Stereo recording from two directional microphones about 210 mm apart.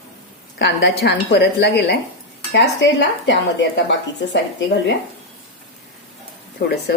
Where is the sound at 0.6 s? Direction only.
55° left (ahead or behind).